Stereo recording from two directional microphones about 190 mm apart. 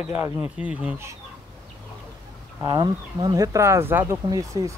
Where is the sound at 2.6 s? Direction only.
20° right (ahead or behind).